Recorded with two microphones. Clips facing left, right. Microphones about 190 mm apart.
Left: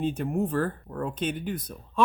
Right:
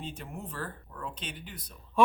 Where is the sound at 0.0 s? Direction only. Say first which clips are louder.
Left 14 dB; 50° left (ahead or behind).